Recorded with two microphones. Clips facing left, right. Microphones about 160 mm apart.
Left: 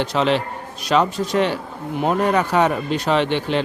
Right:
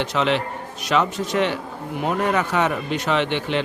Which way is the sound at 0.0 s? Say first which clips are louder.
Left 2 dB; 35° left (ahead or behind).